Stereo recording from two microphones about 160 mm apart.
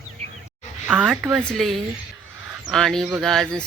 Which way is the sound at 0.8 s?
10° right (ahead or behind).